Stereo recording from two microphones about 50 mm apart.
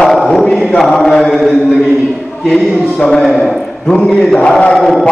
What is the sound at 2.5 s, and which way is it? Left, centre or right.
Speech, centre.